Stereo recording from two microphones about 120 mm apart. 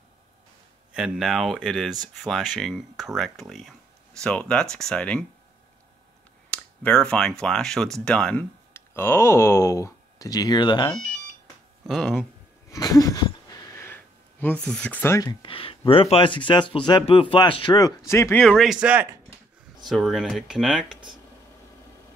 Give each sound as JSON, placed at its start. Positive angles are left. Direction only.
{"t": 0.9, "sound": "speech", "side_deg": -5}
{"t": 6.5, "sound": "speech", "side_deg": 10}
{"t": 8.7, "sound": "speech", "side_deg": 20}
{"t": 11.8, "sound": "speech", "side_deg": 0}
{"t": 12.7, "sound": "a sound", "side_deg": 30}
{"t": 15.4, "sound": "speech", "side_deg": 50}
{"t": 17.7, "sound": "speech", "side_deg": 25}
{"t": 18.4, "sound": "speech", "side_deg": 5}
{"t": 18.8, "sound": "speech", "side_deg": -10}
{"t": 19.8, "sound": "speech", "side_deg": 0}